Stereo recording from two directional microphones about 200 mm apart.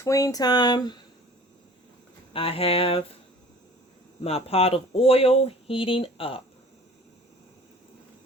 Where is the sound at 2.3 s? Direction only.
30° left (ahead or behind).